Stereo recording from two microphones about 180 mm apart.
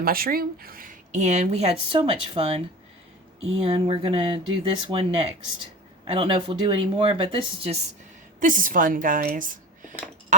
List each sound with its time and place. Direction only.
0.0 s speech: 55° right (ahead or behind); by 7.8 s 30° right (ahead or behind)
8.4 s speech: 45° right (ahead or behind)